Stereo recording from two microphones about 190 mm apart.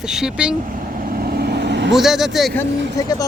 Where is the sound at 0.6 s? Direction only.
45° right (ahead or behind); by 2.0 s 65° right (ahead or behind).